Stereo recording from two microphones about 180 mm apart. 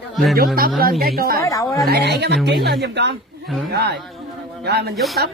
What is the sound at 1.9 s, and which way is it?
Speech, 65° right (ahead or behind).